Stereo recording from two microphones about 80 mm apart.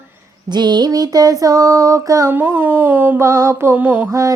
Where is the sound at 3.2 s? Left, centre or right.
Right.